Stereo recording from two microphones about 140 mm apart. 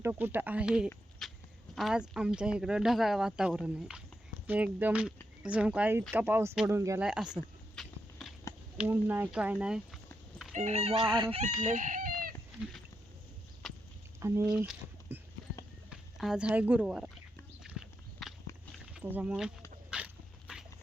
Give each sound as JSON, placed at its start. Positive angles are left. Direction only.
{"t": 0.0, "sound": "speech", "side_deg": -15}
{"t": 1.2, "sound": "livestock", "side_deg": 5}
{"t": 1.7, "sound": "speech", "side_deg": -5}
{"t": 7.0, "sound": "a sound", "side_deg": -5}
{"t": 8.8, "sound": "speech", "side_deg": -15}
{"t": 10.5, "sound": "speech", "side_deg": -55}
{"t": 11.6, "sound": "chicken", "side_deg": -60}
{"t": 14.2, "sound": "speech", "side_deg": -20}
{"t": 14.4, "sound": "speech", "side_deg": -5}
{"t": 15.1, "sound": "clip-clop", "side_deg": -15}
{"t": 15.9, "sound": "speech", "side_deg": -5}
{"t": 17.6, "sound": "horse", "side_deg": -5}
{"t": 18.9, "sound": "speech", "side_deg": -10}
{"t": 19.9, "sound": "dog", "side_deg": -5}